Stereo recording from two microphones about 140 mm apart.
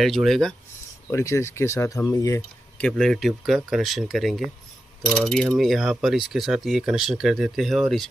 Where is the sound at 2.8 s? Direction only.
5° left (ahead or behind).